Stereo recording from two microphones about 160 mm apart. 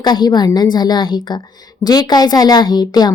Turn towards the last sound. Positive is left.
turn(degrees=25)  # may be behind; listen again after turning